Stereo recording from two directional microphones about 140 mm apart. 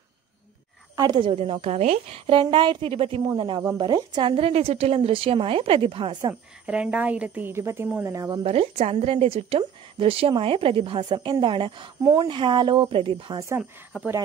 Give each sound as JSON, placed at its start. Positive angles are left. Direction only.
{"t": 0.9, "sound": "a woman's voice", "side_deg": -30}
{"t": 1.3, "sound": "a woman's voice", "side_deg": -45}
{"t": 6.6, "sound": "a woman's voice", "side_deg": -10}
{"t": 8.4, "sound": "a woman's voice", "side_deg": -45}
{"t": 12.0, "sound": "a woman's voice", "side_deg": -20}
{"t": 12.3, "sound": "a woman's voice", "side_deg": -35}
{"t": 13.6, "sound": "a woman's voice", "side_deg": -5}